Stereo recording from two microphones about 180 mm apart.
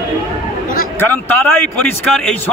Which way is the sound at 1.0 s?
10° left (ahead or behind).